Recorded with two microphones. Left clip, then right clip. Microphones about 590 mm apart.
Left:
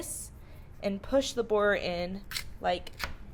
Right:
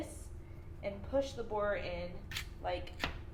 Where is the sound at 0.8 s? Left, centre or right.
Left.